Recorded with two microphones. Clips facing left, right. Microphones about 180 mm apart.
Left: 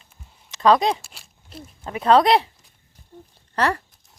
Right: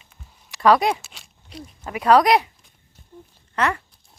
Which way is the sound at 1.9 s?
25° left (ahead or behind).